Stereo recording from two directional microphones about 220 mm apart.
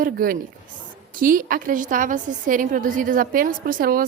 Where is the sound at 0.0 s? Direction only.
40° right (ahead or behind).